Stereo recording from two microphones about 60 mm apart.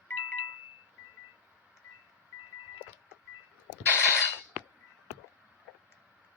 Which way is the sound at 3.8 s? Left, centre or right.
Left.